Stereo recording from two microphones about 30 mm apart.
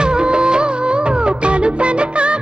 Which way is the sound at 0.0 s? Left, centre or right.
Right.